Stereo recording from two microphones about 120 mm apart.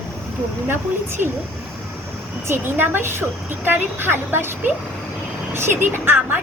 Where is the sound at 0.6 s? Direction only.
20° right (ahead or behind).